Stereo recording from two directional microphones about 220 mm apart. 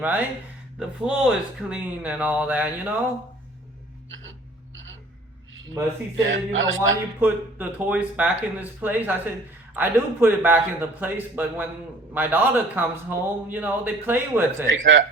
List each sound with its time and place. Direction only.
0.0 s speech: 10° right (ahead or behind)
4.2 s a sound: 60° right (ahead or behind)
6.2 s a man's voice: 60° right (ahead or behind)
7.2 s speech: 10° right (ahead or behind)
14.7 s a man's voice: 55° right (ahead or behind)